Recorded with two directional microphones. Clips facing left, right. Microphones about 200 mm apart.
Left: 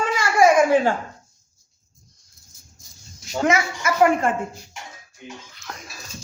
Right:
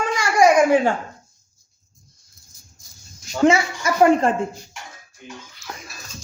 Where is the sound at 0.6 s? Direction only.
15° right (ahead or behind).